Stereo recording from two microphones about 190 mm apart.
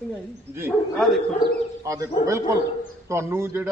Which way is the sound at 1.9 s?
15° right (ahead or behind).